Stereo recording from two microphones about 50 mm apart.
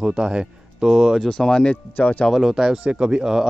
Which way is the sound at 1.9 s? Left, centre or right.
Left.